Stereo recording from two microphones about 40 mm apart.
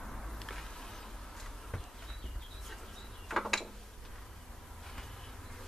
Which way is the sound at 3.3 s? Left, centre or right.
Centre.